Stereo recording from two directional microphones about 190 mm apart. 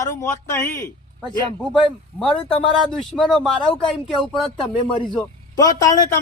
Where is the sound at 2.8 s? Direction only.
5° left (ahead or behind).